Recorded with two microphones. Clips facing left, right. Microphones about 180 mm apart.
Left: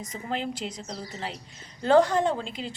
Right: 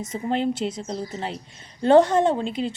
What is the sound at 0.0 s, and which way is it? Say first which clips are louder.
A woman's voice: right 7 dB; 25° right (ahead or behind).